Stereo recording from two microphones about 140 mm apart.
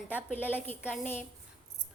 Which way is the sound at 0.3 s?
15° left (ahead or behind).